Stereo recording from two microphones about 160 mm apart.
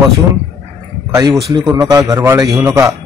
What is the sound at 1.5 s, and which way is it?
A man's voice, 20° right (ahead or behind).